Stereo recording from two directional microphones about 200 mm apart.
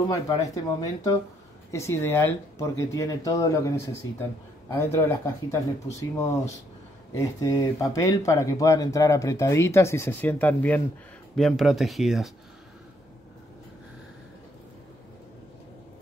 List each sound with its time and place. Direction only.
0.1 s speech: 20° left (ahead or behind)
7.2 s speech: 15° left (ahead or behind); by 12.3 s centre (ahead or behind)